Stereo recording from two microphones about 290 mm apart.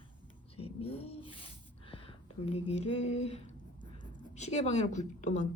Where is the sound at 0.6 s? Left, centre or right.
Centre.